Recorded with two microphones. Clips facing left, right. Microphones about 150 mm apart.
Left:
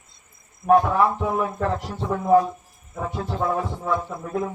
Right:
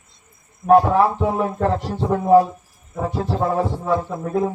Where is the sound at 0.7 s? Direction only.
30° right (ahead or behind).